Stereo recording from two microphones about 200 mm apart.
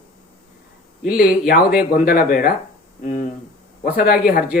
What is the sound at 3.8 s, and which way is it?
Speech, 45° left (ahead or behind).